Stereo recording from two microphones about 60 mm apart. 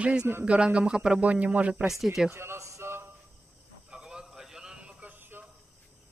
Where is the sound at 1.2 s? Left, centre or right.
Right.